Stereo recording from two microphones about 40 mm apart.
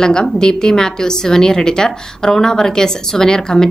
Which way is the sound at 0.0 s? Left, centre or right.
Centre.